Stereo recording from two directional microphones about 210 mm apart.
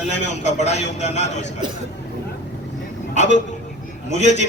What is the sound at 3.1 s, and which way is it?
A man's voice, 35° left (ahead or behind).